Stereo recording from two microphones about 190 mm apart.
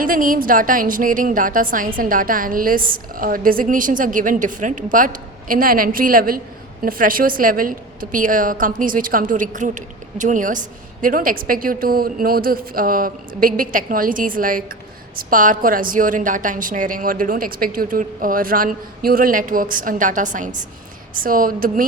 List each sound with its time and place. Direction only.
0.0 s a woman's voice: 45° right (ahead or behind)